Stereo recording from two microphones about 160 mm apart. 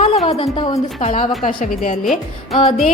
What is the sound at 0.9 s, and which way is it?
Speech, 45° left (ahead or behind).